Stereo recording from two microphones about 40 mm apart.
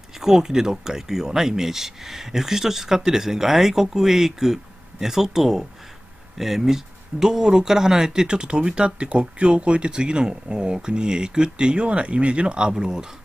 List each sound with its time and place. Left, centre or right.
0.2 s speech: centre